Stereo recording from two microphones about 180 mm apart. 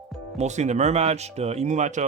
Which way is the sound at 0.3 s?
40° right (ahead or behind).